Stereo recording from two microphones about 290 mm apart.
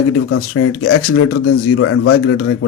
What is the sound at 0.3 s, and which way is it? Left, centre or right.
Speech, left.